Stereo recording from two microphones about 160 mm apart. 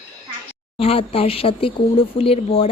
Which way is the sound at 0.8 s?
35° left (ahead or behind).